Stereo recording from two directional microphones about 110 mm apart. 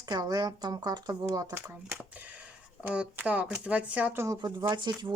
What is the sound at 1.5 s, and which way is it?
Speech, 20° right (ahead or behind).